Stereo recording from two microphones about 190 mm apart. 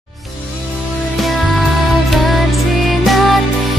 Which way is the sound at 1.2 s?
Centre (ahead or behind).